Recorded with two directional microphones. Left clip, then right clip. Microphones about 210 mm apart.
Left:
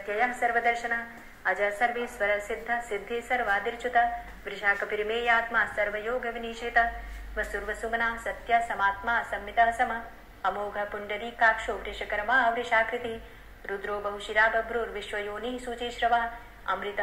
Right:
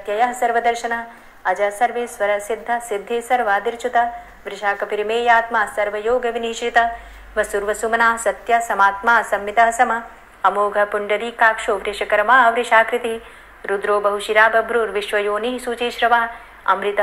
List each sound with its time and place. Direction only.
0.0 s a woman's voice: 25° right (ahead or behind)